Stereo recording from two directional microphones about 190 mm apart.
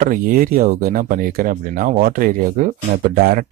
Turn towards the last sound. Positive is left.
turn(degrees=-50)  # may be behind; listen again after turning